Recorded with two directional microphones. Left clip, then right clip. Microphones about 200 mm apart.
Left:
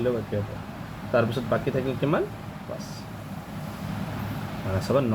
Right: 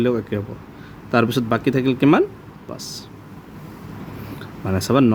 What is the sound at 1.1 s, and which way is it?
Speech, 65° right (ahead or behind).